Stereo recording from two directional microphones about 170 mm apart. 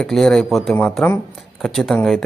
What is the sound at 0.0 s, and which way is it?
Speech, centre (ahead or behind).